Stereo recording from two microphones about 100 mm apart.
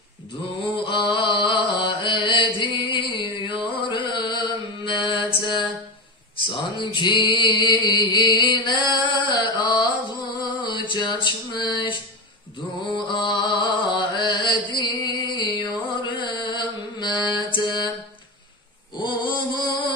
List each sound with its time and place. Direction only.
0.8 s mantra: 55° left (ahead or behind)
6.3 s mantra: 55° left (ahead or behind)
12.9 s music: 50° left (ahead or behind)
16.0 s mantra: 55° left (ahead or behind)
18.9 s mantra: 50° left (ahead or behind)